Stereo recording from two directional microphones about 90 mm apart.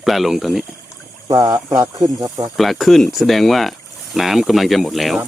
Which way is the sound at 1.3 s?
45° right (ahead or behind).